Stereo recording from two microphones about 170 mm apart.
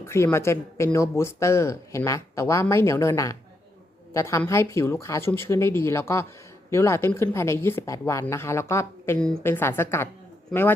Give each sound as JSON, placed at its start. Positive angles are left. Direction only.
{"t": 0.0, "sound": "speech", "side_deg": 15}